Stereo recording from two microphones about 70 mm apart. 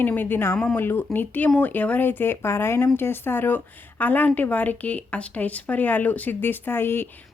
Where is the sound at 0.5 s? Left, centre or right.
Centre.